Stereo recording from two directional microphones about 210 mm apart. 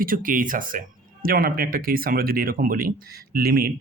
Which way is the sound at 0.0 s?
40° right (ahead or behind).